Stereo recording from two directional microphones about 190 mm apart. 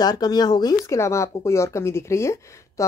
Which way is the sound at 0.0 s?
20° left (ahead or behind).